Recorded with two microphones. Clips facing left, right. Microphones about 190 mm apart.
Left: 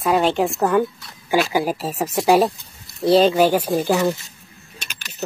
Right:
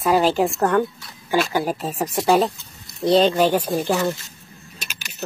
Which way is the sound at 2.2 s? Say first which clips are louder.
Left 2 dB; 15° left (ahead or behind).